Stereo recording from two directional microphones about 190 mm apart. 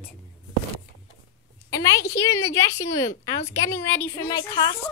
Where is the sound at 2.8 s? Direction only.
15° left (ahead or behind).